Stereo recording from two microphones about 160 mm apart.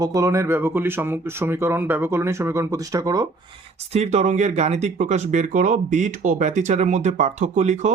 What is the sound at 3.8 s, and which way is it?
Speech, 40° right (ahead or behind).